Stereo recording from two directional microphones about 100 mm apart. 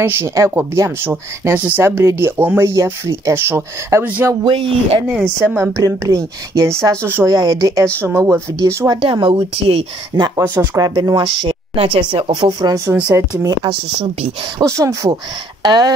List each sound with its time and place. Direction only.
0.0 s speech: 25° right (ahead or behind)
2.7 s speech: 35° right (ahead or behind)
4.5 s speech: 65° right (ahead or behind)
5.0 s a woman's voice: 15° right (ahead or behind)
5.8 s speech: 35° right (ahead or behind)
7.2 s speech: 40° right (ahead or behind)
8.9 s speech: 55° right (ahead or behind); by 9.8 s 70° right (ahead or behind)
10.1 s speech: 40° right (ahead or behind)
12.4 s speech: 45° right (ahead or behind)
14.6 s speech: 30° right (ahead or behind)
15.6 s speech: 45° right (ahead or behind)